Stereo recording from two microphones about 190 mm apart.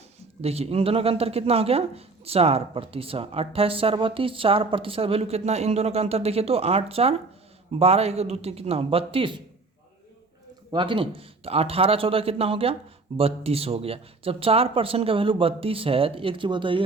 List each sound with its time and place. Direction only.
0.4 s speech: 30° right (ahead or behind)
10.7 s speech: 25° right (ahead or behind)